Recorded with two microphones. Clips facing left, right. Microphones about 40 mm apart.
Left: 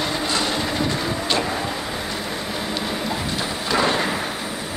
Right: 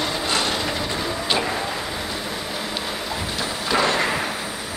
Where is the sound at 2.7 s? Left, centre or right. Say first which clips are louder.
Left 2 dB; centre.